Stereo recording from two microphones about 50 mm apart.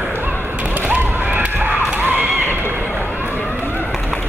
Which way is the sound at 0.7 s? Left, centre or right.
Right.